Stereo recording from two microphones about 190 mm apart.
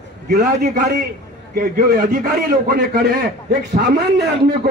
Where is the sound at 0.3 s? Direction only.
50° right (ahead or behind).